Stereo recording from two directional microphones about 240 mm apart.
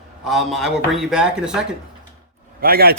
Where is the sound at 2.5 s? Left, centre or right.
Right.